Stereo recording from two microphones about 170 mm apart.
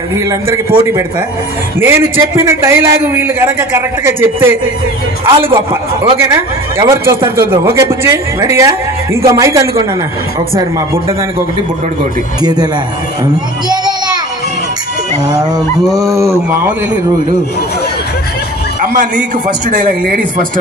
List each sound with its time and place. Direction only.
0.1 s a man's voice: 15° right (ahead or behind)
1.8 s a man's voice: 15° right (ahead or behind)
16.0 s a man's voice: 15° right (ahead or behind)
18.9 s a man's voice: 55° right (ahead or behind)